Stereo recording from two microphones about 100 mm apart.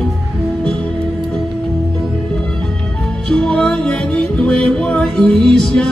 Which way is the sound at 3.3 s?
5° left (ahead or behind).